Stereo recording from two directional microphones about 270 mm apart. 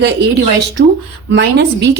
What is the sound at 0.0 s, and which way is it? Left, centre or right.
Speech, right.